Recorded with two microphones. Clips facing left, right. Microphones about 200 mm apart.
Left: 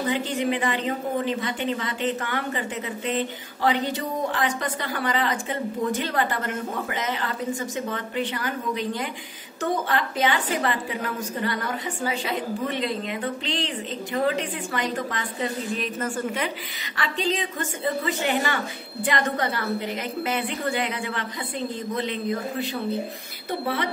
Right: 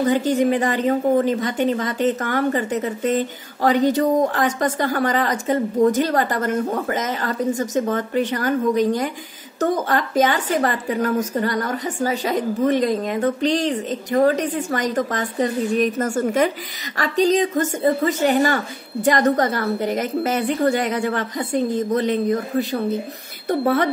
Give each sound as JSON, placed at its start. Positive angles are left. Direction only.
{"t": 0.0, "sound": "a woman's voice", "side_deg": -40}